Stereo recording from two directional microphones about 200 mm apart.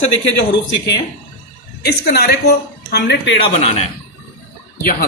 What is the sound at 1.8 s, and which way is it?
A man's voice, 55° left (ahead or behind).